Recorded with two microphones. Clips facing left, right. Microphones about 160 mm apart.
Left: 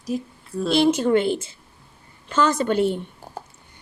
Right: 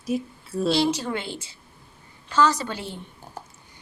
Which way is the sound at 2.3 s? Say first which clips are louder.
Left 2 dB; 50° left (ahead or behind).